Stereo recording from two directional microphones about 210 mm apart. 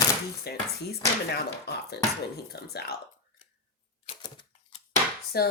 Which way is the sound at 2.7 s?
50° left (ahead or behind).